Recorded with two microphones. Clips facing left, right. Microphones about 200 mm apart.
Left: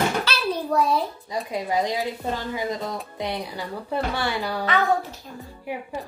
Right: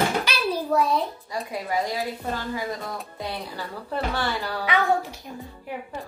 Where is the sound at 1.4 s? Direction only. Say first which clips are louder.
Left 3 dB; 20° left (ahead or behind).